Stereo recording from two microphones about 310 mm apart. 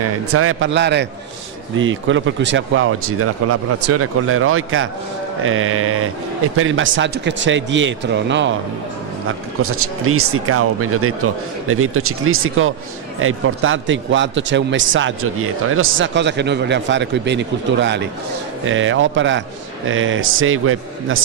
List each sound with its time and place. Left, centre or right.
0.0 s a man's voice: right
9.6 s a man's voice: right